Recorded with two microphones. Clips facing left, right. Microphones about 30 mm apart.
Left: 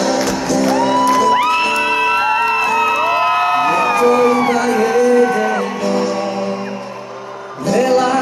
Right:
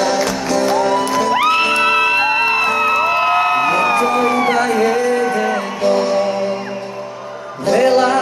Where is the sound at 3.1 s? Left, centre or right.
Centre.